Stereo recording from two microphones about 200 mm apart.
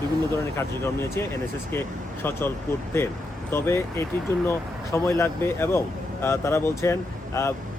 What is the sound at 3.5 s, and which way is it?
Speech, 10° left (ahead or behind).